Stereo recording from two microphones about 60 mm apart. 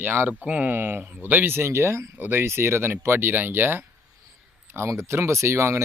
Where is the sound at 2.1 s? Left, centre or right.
Right.